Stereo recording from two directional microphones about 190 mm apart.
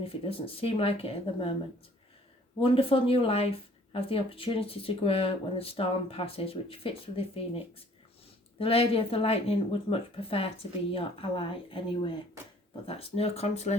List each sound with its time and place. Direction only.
0.0 s speech: 30° left (ahead or behind)
2.6 s speech: 30° left (ahead or behind)
8.5 s speech: 30° left (ahead or behind)